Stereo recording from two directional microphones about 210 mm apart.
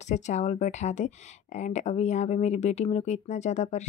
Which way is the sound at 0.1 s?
35° left (ahead or behind).